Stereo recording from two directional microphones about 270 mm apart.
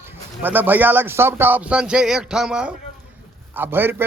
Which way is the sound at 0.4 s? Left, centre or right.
Centre.